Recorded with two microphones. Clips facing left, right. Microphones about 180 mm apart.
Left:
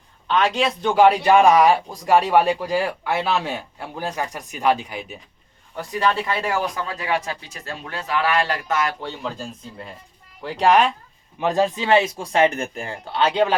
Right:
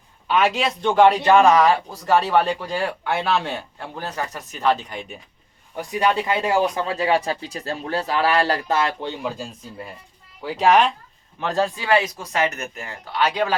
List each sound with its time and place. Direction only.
0.3 s a man's voice: 5° right (ahead or behind)
5.7 s speech: 15° right (ahead or behind)
9.2 s a child's voice: 10° right (ahead or behind)
11.3 s speech: 15° left (ahead or behind)